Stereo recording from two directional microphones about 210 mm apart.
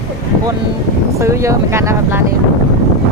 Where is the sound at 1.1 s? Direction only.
15° right (ahead or behind).